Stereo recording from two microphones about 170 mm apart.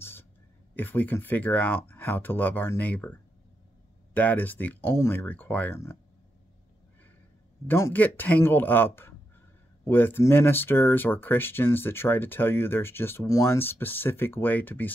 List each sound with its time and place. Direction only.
0.0 s a sound: 15° left (ahead or behind)
0.7 s speech: 10° left (ahead or behind)
7.6 s speech: 15° left (ahead or behind)